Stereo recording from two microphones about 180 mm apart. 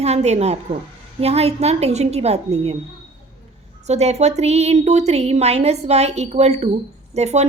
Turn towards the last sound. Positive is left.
turn(degrees=-40)  # may be behind; listen again after turning